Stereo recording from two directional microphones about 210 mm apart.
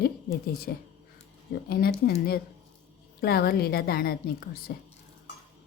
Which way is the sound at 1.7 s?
45° left (ahead or behind).